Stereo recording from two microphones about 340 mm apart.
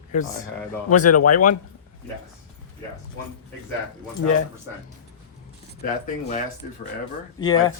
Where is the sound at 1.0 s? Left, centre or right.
Left.